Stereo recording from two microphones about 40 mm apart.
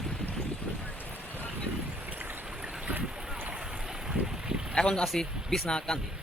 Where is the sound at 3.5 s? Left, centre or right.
Centre.